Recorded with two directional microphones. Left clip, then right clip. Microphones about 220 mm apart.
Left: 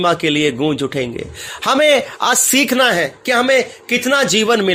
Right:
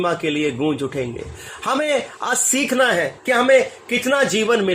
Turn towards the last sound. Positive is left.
turn(degrees=40)  # may be behind; listen again after turning